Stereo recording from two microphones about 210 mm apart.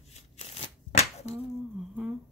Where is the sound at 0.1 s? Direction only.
30° left (ahead or behind).